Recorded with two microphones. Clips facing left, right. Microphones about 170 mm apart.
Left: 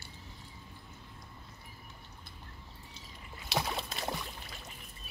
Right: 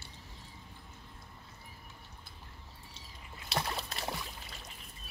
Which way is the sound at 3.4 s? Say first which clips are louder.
Left 2 dB; centre (ahead or behind).